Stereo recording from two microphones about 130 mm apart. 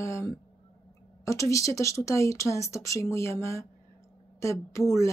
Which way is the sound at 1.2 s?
25° left (ahead or behind).